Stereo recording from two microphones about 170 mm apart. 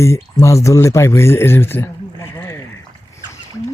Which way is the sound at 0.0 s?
15° left (ahead or behind).